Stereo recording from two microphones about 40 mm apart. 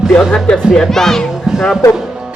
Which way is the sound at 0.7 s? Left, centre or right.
Centre.